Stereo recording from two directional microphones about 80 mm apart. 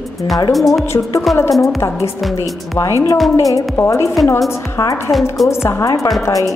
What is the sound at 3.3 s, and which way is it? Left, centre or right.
Speech, left.